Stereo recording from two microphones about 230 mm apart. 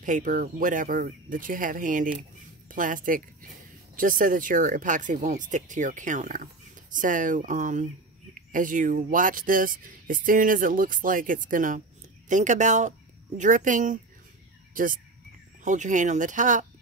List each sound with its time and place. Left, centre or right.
0.0 s speech: right